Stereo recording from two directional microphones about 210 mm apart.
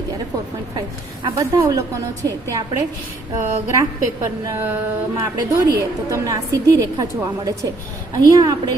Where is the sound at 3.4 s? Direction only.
15° right (ahead or behind).